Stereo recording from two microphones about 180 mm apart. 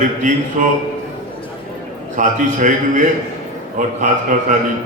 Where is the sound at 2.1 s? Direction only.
45° right (ahead or behind).